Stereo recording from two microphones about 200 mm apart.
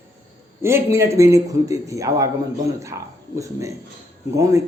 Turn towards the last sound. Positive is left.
turn(degrees=-15)  # may be behind; listen again after turning